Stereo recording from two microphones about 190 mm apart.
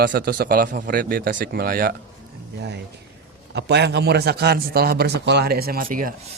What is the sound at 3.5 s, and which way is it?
A man's voice, 60° right (ahead or behind).